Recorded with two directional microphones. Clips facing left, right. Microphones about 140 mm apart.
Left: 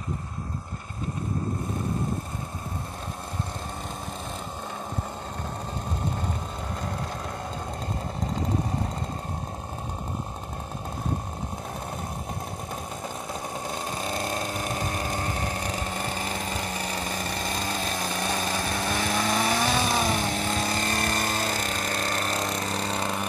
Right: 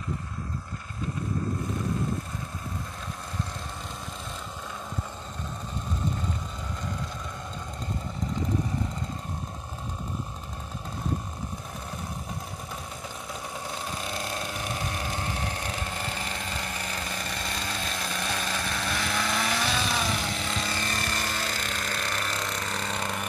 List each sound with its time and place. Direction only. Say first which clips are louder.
13.3 s vehicle: left 2 dB; 40° left (ahead or behind)